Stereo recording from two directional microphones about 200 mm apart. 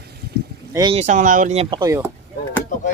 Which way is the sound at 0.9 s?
35° right (ahead or behind).